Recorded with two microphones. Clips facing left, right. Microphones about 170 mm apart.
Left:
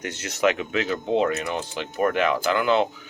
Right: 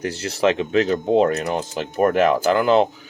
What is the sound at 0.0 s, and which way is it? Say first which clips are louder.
Speech: right 3 dB; 35° right (ahead or behind).